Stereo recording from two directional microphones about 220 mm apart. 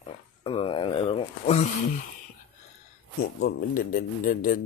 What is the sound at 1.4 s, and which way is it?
Speech, 35° left (ahead or behind).